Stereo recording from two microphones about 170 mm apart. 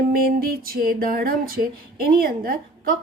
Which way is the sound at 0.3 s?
60° right (ahead or behind).